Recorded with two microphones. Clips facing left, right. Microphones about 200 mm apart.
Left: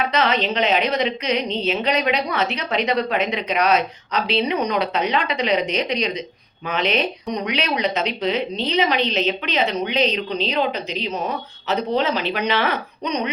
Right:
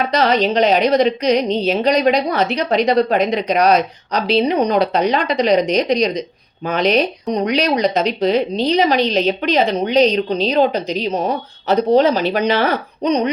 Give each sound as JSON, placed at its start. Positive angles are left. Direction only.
{"t": 0.0, "sound": "a woman's voice", "side_deg": -40}